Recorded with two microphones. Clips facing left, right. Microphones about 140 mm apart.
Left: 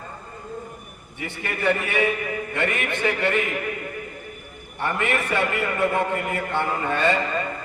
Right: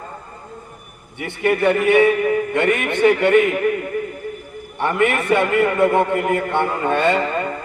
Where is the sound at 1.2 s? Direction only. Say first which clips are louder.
Right 9 dB; 65° right (ahead or behind).